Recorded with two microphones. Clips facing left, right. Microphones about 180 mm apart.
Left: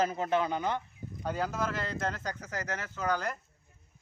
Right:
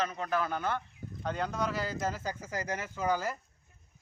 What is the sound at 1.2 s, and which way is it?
Speech, 5° left (ahead or behind).